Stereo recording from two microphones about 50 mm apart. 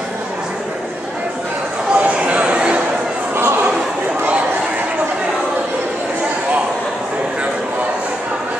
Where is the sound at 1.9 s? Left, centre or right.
Right.